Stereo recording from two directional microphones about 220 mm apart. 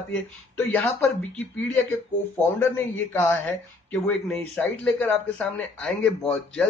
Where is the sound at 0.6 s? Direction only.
10° left (ahead or behind).